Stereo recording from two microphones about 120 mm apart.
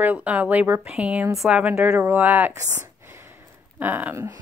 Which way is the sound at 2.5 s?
20° right (ahead or behind).